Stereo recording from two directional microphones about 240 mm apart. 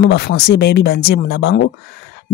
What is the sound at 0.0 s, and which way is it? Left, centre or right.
Speech, left.